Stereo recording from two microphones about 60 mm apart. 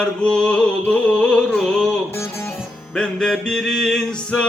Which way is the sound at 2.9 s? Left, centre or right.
Centre.